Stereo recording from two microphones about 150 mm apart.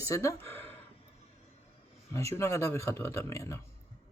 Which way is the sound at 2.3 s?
20° left (ahead or behind).